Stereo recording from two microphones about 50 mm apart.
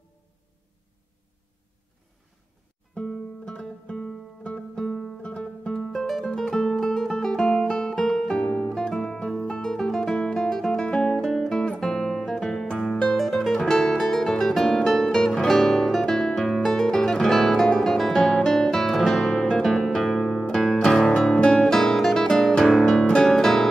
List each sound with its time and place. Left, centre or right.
2.9 s music: centre
5.8 s music: centre
10.3 s guitar: centre
11.1 s music: centre
13.1 s music: centre